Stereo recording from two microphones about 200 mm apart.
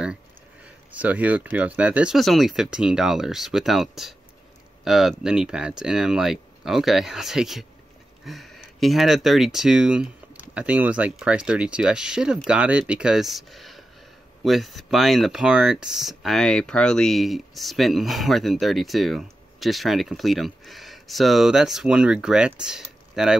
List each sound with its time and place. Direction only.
0.9 s speech: 5° right (ahead or behind)